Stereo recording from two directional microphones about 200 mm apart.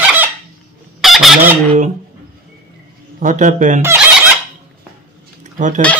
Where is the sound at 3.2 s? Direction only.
40° right (ahead or behind).